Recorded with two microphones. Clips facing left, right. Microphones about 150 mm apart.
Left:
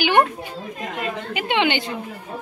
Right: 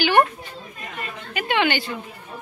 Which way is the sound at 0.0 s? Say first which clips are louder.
Even; 15° left (ahead or behind).